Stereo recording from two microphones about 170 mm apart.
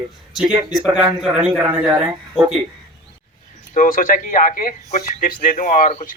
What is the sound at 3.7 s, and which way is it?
A man's voice, 50° left (ahead or behind).